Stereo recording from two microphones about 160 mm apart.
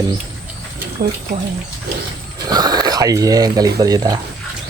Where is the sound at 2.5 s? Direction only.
25° right (ahead or behind).